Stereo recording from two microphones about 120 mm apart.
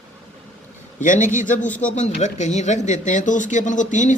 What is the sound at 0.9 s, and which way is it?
Speech, 90° left.